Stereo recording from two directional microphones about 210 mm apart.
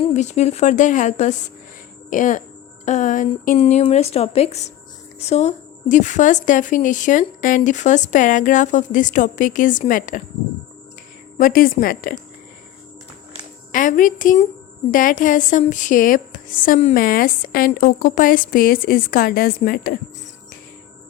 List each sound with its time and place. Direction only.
0.0 s a woman's voice: 30° left (ahead or behind)
11.3 s a woman's voice: 40° left (ahead or behind)
13.7 s a woman's voice: 40° left (ahead or behind)